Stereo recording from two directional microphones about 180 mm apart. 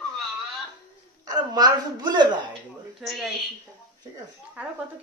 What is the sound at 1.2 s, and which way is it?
Speech, 25° right (ahead or behind).